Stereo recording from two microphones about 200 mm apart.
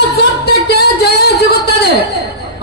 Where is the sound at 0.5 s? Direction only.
55° left (ahead or behind).